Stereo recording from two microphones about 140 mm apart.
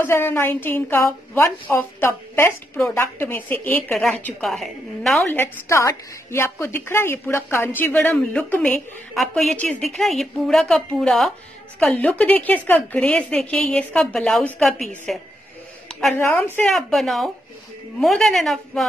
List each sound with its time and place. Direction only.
0.0 s a woman's voice: 15° left (ahead or behind)
5.3 s a woman's voice: 20° left (ahead or behind); by 15.1 s centre (ahead or behind)
15.9 s a sound: centre (ahead or behind)
16.2 s a woman's voice: 15° left (ahead or behind)
16.5 s a woman's voice: 5° left (ahead or behind)